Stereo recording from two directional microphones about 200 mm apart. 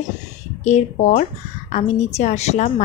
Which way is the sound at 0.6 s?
35° left (ahead or behind).